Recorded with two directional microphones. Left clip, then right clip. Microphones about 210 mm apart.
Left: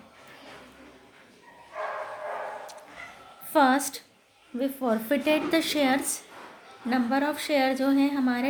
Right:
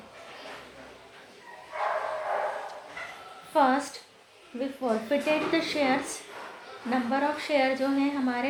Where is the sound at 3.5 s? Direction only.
40° left (ahead or behind).